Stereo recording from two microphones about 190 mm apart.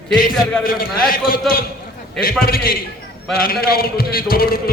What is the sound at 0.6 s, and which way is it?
A man's voice, 50° left (ahead or behind).